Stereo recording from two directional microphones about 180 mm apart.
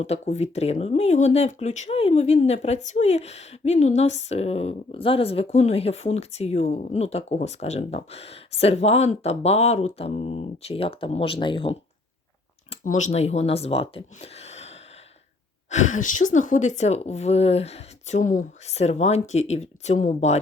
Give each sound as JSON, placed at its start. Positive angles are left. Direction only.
{"t": 0.0, "sound": "speech", "side_deg": 35}
{"t": 12.8, "sound": "speech", "side_deg": 40}
{"t": 15.7, "sound": "speech", "side_deg": 45}